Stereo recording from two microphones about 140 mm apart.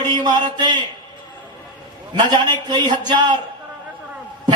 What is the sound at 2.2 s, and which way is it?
Speech, 30° right (ahead or behind).